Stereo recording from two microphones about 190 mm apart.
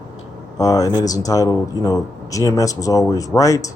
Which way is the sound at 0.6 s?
20° left (ahead or behind).